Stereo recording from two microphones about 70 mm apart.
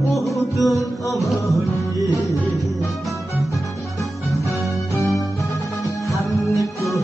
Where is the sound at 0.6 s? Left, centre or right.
Left.